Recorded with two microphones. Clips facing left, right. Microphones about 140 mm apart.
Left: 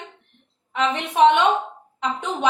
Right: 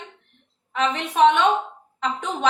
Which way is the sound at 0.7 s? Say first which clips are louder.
Left 1 dB; 20° left (ahead or behind).